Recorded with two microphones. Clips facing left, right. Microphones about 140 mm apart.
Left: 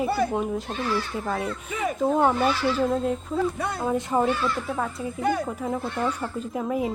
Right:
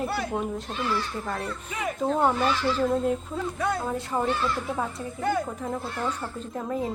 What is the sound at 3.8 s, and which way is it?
Speech, 20° left (ahead or behind).